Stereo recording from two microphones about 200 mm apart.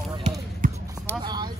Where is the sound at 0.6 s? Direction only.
40° right (ahead or behind).